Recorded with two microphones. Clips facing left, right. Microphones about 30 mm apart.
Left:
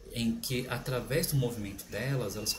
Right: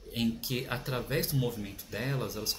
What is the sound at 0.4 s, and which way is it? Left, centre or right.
Speech, centre.